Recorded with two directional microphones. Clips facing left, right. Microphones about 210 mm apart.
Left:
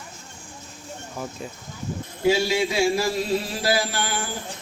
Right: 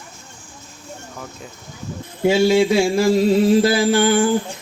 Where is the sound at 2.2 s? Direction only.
55° right (ahead or behind).